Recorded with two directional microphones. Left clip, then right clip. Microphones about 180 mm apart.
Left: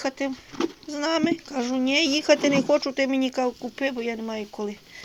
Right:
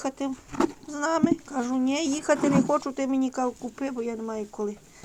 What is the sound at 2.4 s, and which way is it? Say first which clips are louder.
Speech: left 2 dB; 35° right (ahead or behind).